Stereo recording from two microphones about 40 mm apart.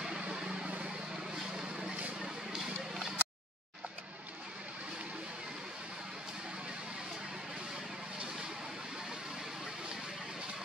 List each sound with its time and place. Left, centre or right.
0.3 s music: centre
0.8 s vehicle: centre
2.1 s a sound: centre